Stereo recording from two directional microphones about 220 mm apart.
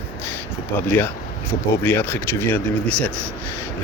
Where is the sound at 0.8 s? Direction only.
10° left (ahead or behind).